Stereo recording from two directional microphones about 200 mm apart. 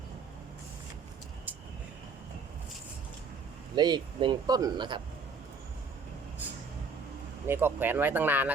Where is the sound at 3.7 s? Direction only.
20° right (ahead or behind).